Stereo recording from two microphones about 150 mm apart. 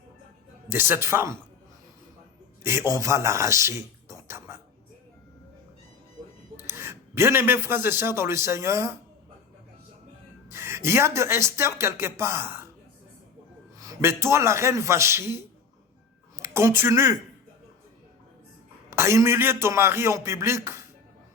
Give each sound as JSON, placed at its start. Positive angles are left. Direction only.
{"t": 0.7, "sound": "speech", "side_deg": -15}
{"t": 2.6, "sound": "a man's voice", "side_deg": -20}
{"t": 6.7, "sound": "a man's voice", "side_deg": -15}
{"t": 10.5, "sound": "speech", "side_deg": -15}
{"t": 13.7, "sound": "a man's voice", "side_deg": -20}
{"t": 16.4, "sound": "speech", "side_deg": -20}
{"t": 18.9, "sound": "speech", "side_deg": -20}